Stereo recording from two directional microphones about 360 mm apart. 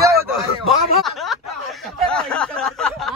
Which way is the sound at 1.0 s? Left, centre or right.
Centre.